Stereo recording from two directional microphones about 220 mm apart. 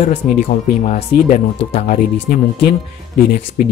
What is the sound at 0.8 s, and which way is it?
Speech, 30° left (ahead or behind).